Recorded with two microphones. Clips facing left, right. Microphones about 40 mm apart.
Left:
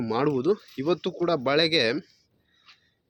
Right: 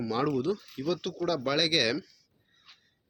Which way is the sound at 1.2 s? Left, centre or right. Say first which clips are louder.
Left 5 dB; centre.